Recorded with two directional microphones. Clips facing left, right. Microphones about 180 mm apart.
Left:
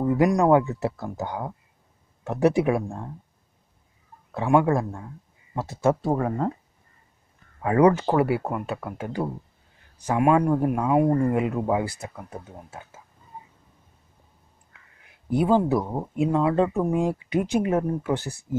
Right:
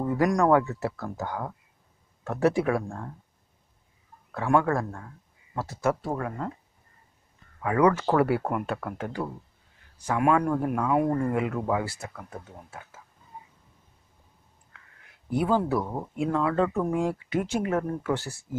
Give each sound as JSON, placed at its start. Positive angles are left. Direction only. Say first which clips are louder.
{"t": 0.0, "sound": "speech", "louder": "left 3 dB", "side_deg": 20}
{"t": 4.3, "sound": "speech", "louder": "left 3 dB", "side_deg": 20}
{"t": 7.6, "sound": "speech", "louder": "left 4 dB", "side_deg": 30}
{"t": 7.9, "sound": "speech", "louder": "left 1 dB", "side_deg": 20}
{"t": 14.7, "sound": "speech", "louder": "right 1 dB", "side_deg": 15}